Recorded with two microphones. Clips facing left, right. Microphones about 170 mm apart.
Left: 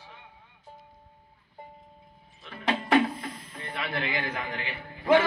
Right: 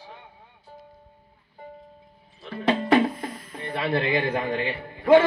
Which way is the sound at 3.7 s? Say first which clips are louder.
Right 8 dB; 30° right (ahead or behind).